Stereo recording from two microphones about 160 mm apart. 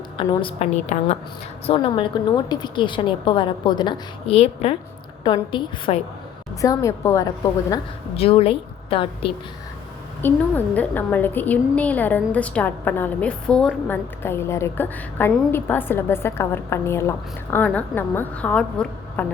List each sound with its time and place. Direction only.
0.2 s a woman's voice: 30° left (ahead or behind)
0.9 s a woman's voice: 50° left (ahead or behind)
1.6 s a woman's voice: 35° left (ahead or behind)
6.6 s a woman's voice: 20° left (ahead or behind)
8.1 s a woman's voice: 35° left (ahead or behind)
10.2 s a woman's voice: 10° left (ahead or behind)